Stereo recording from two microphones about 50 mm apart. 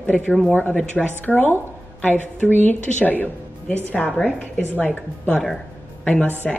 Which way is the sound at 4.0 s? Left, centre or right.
Centre.